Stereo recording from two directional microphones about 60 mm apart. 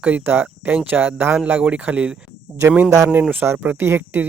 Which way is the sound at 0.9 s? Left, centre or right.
Right.